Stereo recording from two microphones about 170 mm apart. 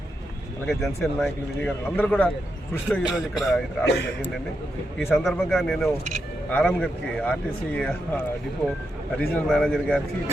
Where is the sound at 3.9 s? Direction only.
90° left.